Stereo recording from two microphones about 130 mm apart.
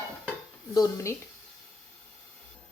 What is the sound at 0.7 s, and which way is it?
Speech, 25° left (ahead or behind).